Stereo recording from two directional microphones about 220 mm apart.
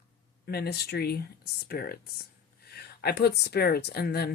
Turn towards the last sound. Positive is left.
turn(degrees=45)  # may be behind; listen again after turning